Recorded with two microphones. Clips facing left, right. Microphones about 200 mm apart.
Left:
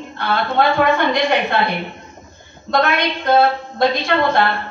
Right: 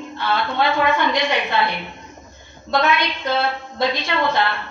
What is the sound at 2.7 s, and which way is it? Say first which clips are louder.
Speech: left 2 dB; 50° left (ahead or behind).